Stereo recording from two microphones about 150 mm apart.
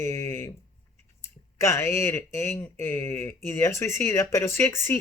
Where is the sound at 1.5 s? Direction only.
20° left (ahead or behind).